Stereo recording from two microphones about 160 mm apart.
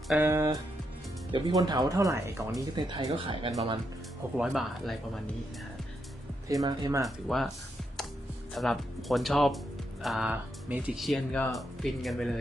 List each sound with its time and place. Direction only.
0.2 s speech: 15° right (ahead or behind); by 3.5 s 35° right (ahead or behind)
4.4 s speech: centre (ahead or behind)
6.5 s speech: 25° right (ahead or behind)
7.2 s speech: centre (ahead or behind)
8.5 s speech: centre (ahead or behind)